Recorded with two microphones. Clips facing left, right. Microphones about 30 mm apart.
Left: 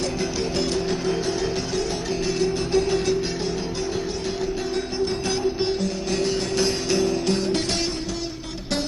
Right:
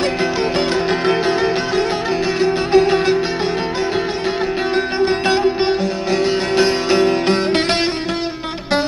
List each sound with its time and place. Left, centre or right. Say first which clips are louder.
2.4 s music: right 9 dB; right
4.9 s music: right 9 dB; right
6.6 s music: right 8 dB; right